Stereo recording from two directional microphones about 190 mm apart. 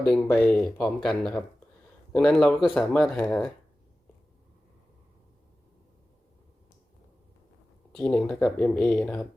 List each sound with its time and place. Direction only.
0.0 s speech: 5° left (ahead or behind)
7.9 s speech: 5° left (ahead or behind)